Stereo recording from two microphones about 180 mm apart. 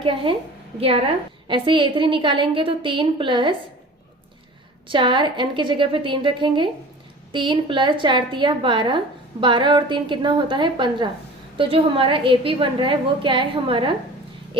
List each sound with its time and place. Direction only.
0.0 s a woman's voice: 30° right (ahead or behind)
4.9 s a woman's voice: 25° right (ahead or behind)
14.5 s a sound: 30° right (ahead or behind)